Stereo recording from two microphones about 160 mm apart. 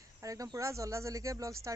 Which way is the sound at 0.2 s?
20° right (ahead or behind).